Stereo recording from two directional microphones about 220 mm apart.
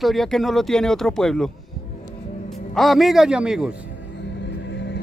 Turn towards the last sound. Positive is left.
turn(degrees=55)  # may be behind; listen again after turning